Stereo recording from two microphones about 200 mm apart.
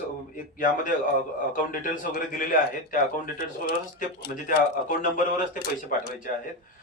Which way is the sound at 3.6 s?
40° left (ahead or behind).